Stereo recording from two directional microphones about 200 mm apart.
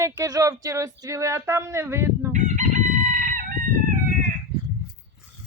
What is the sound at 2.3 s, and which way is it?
Chicken, 35° right (ahead or behind).